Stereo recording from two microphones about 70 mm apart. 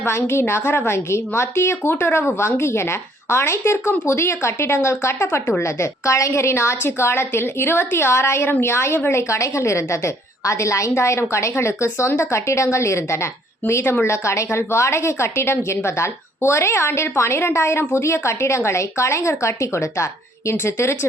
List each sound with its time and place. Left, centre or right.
0.0 s a woman's voice: left